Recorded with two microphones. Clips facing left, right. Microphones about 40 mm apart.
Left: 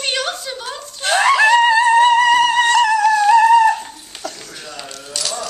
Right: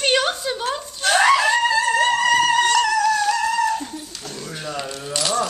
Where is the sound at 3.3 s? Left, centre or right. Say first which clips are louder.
Left 10 dB; left.